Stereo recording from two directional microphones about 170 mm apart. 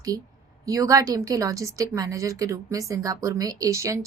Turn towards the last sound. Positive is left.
turn(degrees=-20)  # may be behind; listen again after turning